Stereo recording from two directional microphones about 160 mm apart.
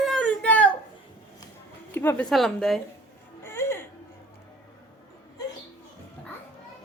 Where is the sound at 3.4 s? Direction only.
15° left (ahead or behind).